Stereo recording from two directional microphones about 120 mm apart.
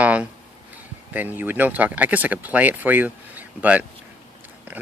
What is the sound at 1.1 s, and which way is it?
Speech, 15° right (ahead or behind).